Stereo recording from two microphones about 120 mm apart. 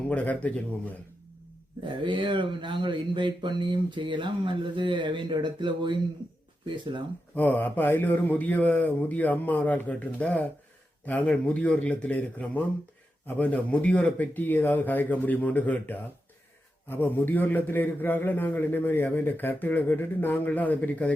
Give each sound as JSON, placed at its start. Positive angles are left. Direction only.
{"t": 0.1, "sound": "a man's voice", "side_deg": 15}
{"t": 1.8, "sound": "speech", "side_deg": -40}
{"t": 7.3, "sound": "a man's voice", "side_deg": 15}